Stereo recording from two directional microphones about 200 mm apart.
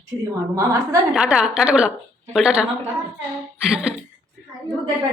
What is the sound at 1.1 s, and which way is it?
Speech, 5° right (ahead or behind).